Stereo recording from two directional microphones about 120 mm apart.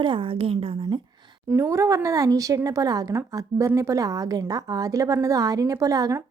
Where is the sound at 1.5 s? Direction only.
20° right (ahead or behind).